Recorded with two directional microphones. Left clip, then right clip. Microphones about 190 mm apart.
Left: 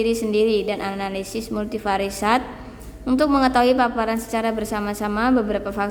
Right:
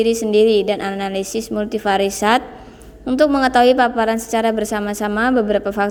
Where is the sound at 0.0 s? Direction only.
30° right (ahead or behind).